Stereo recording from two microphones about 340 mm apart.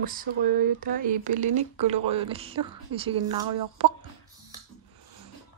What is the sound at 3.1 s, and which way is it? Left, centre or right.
Speech, right.